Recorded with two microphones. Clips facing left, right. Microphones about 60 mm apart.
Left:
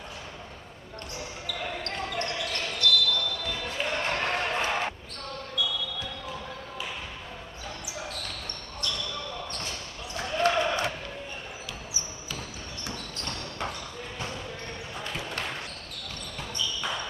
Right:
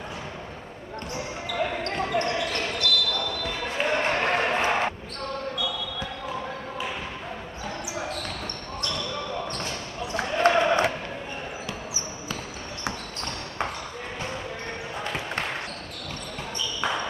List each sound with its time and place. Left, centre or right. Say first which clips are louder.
1.6 s basketball bounce: right 7 dB; right
10.1 s basketball bounce: right 4 dB; right